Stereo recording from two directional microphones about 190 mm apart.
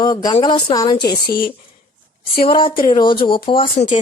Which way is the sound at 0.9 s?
55° left (ahead or behind).